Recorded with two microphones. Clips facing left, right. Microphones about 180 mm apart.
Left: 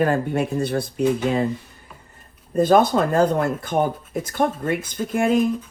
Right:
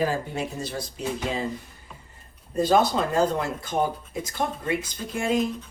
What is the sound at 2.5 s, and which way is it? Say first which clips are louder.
Speech: left 5 dB; 55° left (ahead or behind).